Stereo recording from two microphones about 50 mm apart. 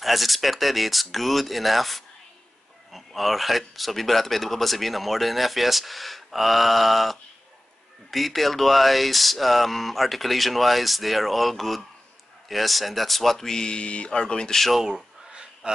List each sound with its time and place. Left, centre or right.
0.0 s speech: centre
14.6 s speech: centre
14.9 s a sound: centre